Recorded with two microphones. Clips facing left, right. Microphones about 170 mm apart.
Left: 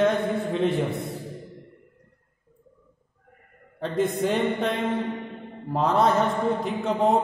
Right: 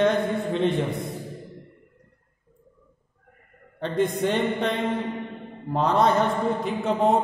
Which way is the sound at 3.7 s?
Centre (ahead or behind).